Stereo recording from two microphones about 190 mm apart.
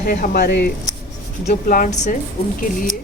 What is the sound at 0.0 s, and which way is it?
Speech, 50° left (ahead or behind).